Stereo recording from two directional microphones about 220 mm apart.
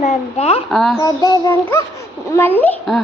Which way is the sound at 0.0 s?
30° left (ahead or behind).